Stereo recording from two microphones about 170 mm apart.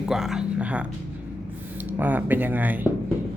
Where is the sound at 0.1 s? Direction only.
5° right (ahead or behind).